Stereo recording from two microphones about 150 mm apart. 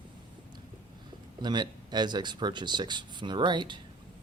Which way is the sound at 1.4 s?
30° right (ahead or behind).